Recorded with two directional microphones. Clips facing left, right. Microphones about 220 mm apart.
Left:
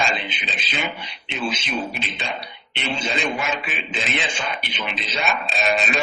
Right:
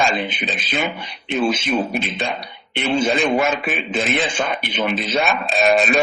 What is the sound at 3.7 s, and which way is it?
A man's voice, 45° right (ahead or behind).